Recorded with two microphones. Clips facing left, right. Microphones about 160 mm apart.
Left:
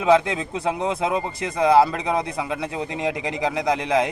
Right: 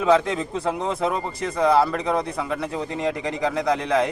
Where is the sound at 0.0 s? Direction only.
10° left (ahead or behind).